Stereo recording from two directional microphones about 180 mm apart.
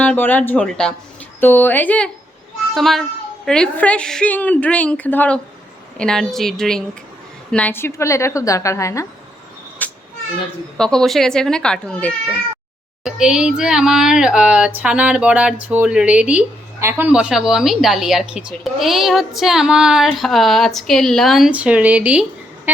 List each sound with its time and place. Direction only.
0.0 s a woman's voice: 10° left (ahead or behind)
9.8 s a sound: 10° left (ahead or behind)
10.8 s a woman's voice: 5° left (ahead or behind)
13.1 s a woman's voice: 5° right (ahead or behind)